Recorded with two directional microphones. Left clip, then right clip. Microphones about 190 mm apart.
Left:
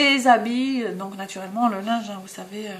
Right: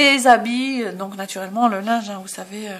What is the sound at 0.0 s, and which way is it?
Speech, 45° right (ahead or behind).